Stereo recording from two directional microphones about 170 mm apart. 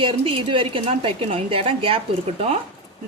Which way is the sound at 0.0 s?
30° right (ahead or behind).